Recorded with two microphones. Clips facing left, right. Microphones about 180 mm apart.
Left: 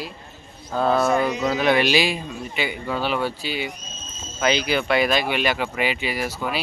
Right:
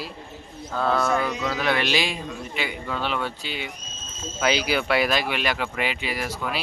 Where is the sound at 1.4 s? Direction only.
20° left (ahead or behind).